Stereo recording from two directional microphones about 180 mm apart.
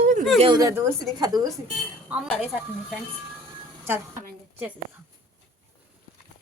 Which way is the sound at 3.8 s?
10° right (ahead or behind).